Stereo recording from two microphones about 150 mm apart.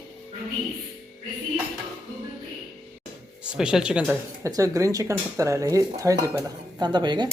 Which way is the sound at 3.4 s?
5° right (ahead or behind).